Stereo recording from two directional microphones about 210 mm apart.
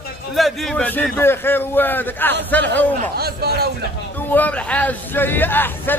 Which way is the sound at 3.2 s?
50° right (ahead or behind).